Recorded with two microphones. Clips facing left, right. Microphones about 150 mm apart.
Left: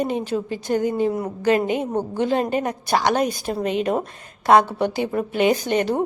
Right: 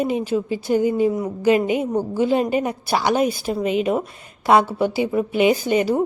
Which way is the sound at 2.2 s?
10° right (ahead or behind).